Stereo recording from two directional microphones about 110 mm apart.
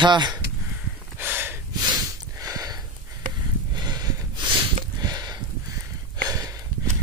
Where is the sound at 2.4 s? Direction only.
30° right (ahead or behind).